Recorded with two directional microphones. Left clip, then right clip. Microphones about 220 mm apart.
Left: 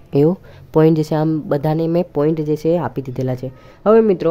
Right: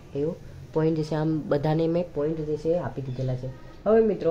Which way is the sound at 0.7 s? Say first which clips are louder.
Left 11 dB; 35° left (ahead or behind).